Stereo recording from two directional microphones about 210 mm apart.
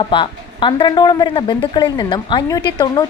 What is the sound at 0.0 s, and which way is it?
Speech, 25° left (ahead or behind).